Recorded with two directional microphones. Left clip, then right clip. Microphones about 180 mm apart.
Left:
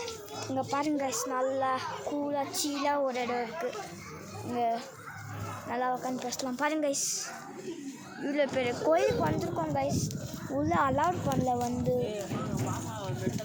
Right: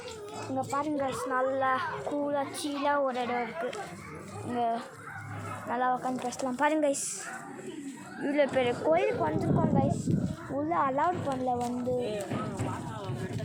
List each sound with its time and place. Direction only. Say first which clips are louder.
0.7 s a woman's voice: left 1 dB; 25° left (ahead or behind)
0.9 s a woman's voice: right 1 dB; 10° left (ahead or behind); by 7.0 s 5° right (ahead or behind)
8.2 s a woman's voice: right 3 dB; 5° right (ahead or behind)
8.8 s speech: left 3 dB; 10° left (ahead or behind)
9.2 s a woman's voice: right 2 dB; centre (ahead or behind)
10.5 s speech: left 1 dB; 15° left (ahead or behind)
10.9 s a woman's voice: even; centre (ahead or behind)